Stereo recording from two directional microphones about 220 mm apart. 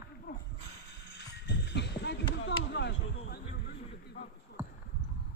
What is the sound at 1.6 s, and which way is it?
Run, 50° left (ahead or behind).